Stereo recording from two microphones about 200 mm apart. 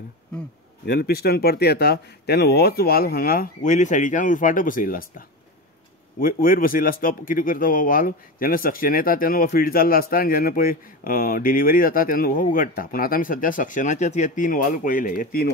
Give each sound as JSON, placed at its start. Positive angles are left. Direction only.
{"t": 0.8, "sound": "speech", "side_deg": 50}
{"t": 6.1, "sound": "speech", "side_deg": 45}